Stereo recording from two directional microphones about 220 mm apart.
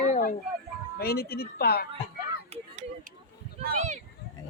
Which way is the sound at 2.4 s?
30° right (ahead or behind).